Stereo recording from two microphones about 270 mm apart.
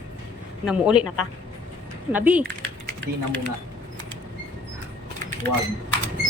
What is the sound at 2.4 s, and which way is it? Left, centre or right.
Typing, centre.